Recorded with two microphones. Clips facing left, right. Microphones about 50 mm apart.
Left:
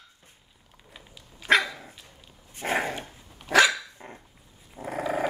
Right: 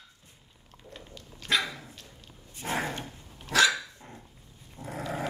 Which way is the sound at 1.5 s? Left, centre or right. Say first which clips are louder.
Left 7 dB; left.